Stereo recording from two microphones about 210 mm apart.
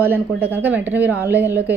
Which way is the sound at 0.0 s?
10° right (ahead or behind).